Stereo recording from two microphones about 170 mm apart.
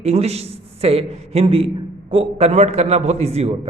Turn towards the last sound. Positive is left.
turn(degrees=-40)  # may be behind; listen again after turning